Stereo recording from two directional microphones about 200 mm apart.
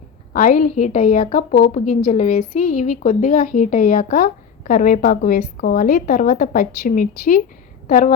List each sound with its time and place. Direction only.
0.3 s a woman's voice: 40° left (ahead or behind)